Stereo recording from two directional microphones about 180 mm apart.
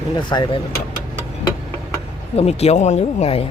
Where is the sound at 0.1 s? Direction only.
25° left (ahead or behind).